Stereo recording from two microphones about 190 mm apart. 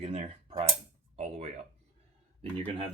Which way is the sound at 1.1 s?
35° right (ahead or behind).